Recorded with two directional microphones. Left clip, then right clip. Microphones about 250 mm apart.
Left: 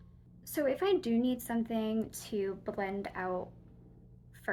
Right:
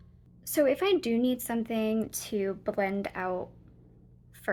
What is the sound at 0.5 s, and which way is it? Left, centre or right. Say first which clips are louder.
Speech: right 5 dB; right.